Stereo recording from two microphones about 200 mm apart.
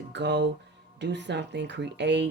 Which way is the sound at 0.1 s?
60° right (ahead or behind).